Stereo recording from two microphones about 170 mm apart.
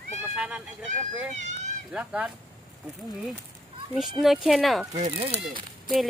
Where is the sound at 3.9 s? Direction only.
Centre (ahead or behind).